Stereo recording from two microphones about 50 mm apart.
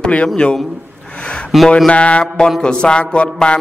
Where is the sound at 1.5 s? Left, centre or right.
Centre.